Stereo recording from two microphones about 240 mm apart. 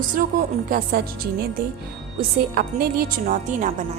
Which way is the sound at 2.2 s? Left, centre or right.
Right.